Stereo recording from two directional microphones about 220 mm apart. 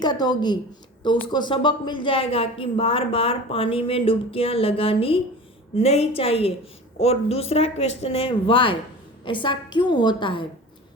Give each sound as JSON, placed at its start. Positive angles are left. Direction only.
{"t": 0.0, "sound": "a woman's voice", "side_deg": 20}